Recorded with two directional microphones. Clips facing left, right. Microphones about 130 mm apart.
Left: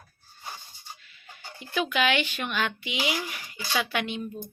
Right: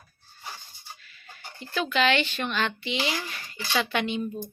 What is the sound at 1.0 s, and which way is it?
Speech, 20° left (ahead or behind).